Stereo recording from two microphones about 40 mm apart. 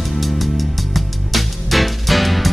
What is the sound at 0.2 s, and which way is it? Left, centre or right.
Music, centre.